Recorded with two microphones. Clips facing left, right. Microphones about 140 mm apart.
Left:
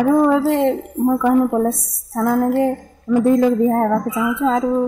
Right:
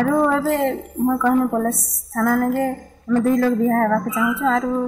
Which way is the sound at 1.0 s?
15° left (ahead or behind).